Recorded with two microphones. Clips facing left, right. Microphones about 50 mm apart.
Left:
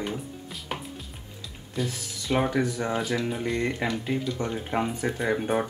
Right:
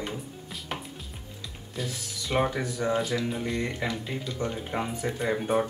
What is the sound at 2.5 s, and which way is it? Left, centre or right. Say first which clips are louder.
Speech: left 3 dB; left.